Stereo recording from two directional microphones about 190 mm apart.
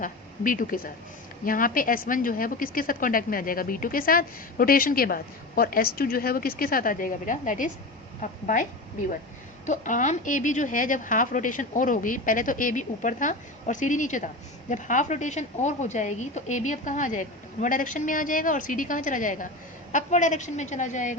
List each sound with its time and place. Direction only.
0.0 s a woman's voice: 45° left (ahead or behind)
9.6 s a woman's voice: 40° left (ahead or behind)